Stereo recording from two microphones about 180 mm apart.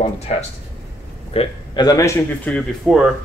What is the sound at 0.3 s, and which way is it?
A man's voice, 40° left (ahead or behind).